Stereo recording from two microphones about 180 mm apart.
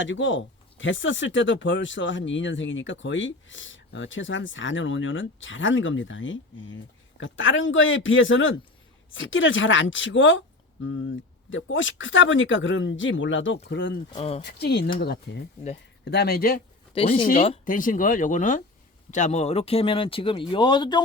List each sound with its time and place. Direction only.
0.0 s speech: 90° left
13.7 s speech: 75° left (ahead or behind)
14.1 s speech: 35° left (ahead or behind)
14.4 s speech: 65° left (ahead or behind)
16.9 s speech: 30° left (ahead or behind)
17.7 s speech: 50° left (ahead or behind); by 21.0 s 25° left (ahead or behind)